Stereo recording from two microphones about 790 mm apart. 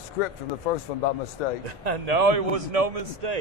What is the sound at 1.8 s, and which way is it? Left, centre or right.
Speech, right.